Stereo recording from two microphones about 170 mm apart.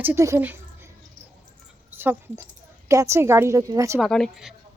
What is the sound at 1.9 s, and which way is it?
A woman's voice, 10° right (ahead or behind).